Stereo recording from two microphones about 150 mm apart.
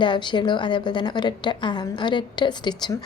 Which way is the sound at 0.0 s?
30° left (ahead or behind).